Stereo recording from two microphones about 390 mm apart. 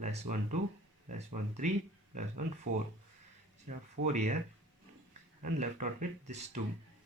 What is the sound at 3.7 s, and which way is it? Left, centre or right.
Speech, centre.